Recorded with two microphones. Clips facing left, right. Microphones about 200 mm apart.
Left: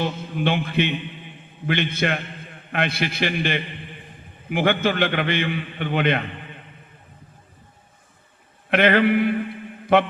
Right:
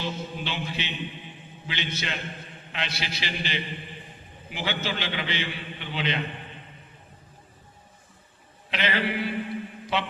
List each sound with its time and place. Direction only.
0.0 s a man's voice: 55° left (ahead or behind)
8.7 s a man's voice: 55° left (ahead or behind)